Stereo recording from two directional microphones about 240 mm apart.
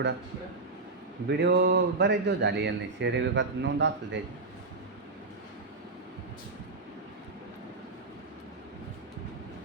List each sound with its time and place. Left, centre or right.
1.3 s speech: right